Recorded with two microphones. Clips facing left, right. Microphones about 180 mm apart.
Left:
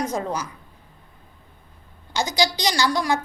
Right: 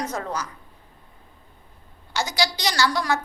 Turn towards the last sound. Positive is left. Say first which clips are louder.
# left 1 dB
turn(degrees=15)  # may be behind; listen again after turning